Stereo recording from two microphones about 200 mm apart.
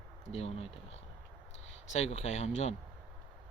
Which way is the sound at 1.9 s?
30° left (ahead or behind).